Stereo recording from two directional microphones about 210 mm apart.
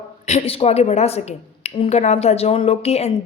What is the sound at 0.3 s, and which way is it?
A woman's voice, 30° left (ahead or behind).